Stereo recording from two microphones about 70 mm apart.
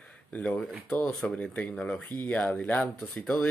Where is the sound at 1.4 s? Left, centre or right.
Centre.